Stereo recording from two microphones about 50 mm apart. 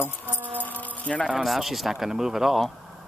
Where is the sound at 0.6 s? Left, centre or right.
Left.